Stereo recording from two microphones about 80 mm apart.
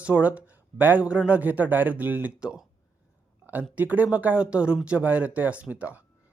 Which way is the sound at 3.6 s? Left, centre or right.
Centre.